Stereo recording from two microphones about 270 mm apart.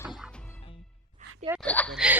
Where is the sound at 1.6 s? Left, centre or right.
Centre.